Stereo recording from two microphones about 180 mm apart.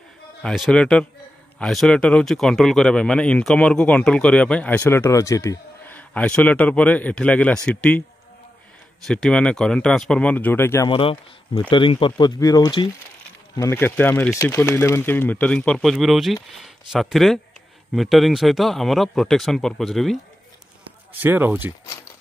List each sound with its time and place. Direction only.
0.4 s speech: 5° left (ahead or behind)
9.0 s speech: 5° left (ahead or behind)
10.9 s speech: 30° left (ahead or behind); by 20.2 s centre (ahead or behind)
21.2 s speech: 10° right (ahead or behind)